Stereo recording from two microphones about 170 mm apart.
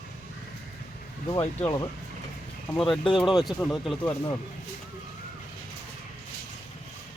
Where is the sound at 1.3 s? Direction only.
20° left (ahead or behind).